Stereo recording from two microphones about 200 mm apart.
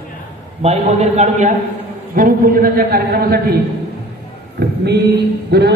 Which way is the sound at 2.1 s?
45° right (ahead or behind).